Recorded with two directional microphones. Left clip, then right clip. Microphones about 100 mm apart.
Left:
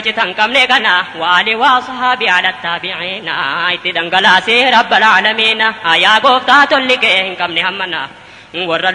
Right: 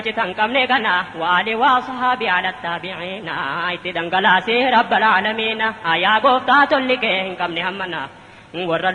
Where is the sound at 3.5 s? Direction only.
30° left (ahead or behind).